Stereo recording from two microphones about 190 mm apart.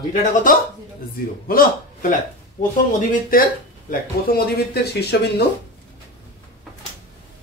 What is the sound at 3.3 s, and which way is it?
A man's voice, 50° left (ahead or behind).